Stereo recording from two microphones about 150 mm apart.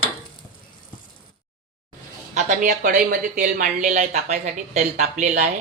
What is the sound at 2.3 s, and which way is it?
A woman's voice, 55° right (ahead or behind).